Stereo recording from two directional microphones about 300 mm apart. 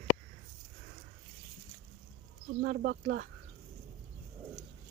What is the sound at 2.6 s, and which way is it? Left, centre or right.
Speech, right.